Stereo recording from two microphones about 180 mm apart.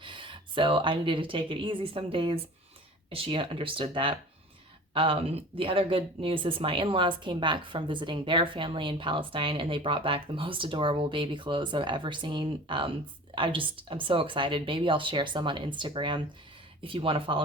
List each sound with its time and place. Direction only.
0.0 s a woman's voice: 25° right (ahead or behind)